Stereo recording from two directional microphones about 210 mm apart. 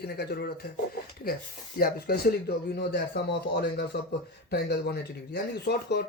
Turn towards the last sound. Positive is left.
turn(degrees=50)  # may be behind; listen again after turning